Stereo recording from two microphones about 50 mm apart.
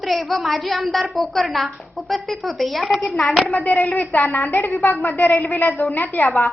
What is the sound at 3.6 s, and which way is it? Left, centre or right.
A woman's voice, left.